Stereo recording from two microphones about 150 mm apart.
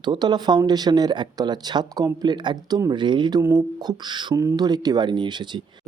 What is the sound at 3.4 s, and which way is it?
Speech, 20° right (ahead or behind).